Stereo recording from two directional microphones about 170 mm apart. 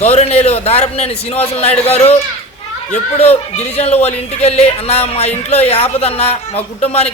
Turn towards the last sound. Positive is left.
turn(degrees=40)  # may be behind; listen again after turning